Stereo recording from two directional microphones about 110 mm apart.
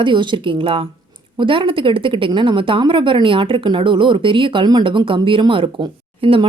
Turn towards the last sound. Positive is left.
turn(degrees=-50)  # may be behind; listen again after turning